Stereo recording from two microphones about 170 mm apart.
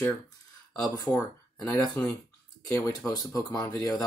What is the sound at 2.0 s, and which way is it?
Speech, 5° left (ahead or behind).